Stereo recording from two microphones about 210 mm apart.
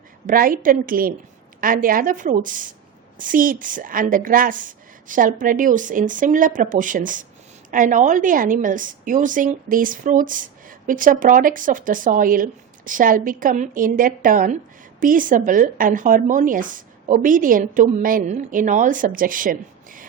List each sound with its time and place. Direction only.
0.3 s a woman's voice: 40° right (ahead or behind)